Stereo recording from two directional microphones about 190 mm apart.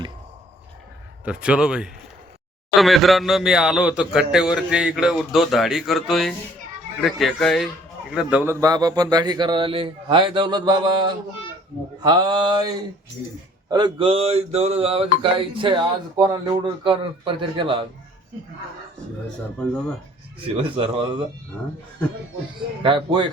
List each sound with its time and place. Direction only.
1.2 s a man's voice: 5° right (ahead or behind)
8.6 s speech: 20° right (ahead or behind)
20.6 s speech: 30° right (ahead or behind)
22.8 s speech: 25° right (ahead or behind)